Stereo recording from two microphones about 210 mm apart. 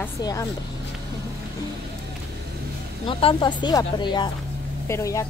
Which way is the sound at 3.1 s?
25° left (ahead or behind).